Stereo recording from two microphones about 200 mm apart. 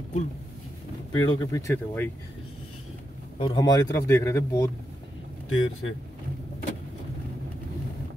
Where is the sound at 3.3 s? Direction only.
25° left (ahead or behind).